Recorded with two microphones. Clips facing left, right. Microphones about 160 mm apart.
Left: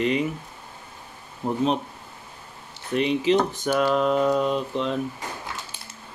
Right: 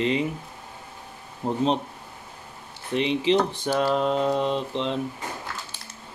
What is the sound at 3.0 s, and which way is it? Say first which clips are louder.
Mantra: left 1 dB; 25° right (ahead or behind).